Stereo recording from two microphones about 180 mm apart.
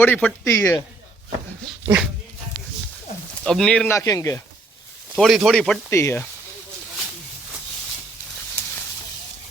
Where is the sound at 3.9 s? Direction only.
15° left (ahead or behind).